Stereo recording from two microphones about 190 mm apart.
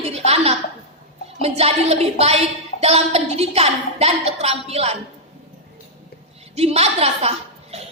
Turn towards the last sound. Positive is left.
turn(degrees=-35)  # may be behind; listen again after turning